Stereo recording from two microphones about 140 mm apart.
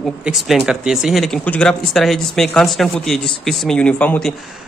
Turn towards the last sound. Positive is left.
turn(degrees=10)  # may be behind; listen again after turning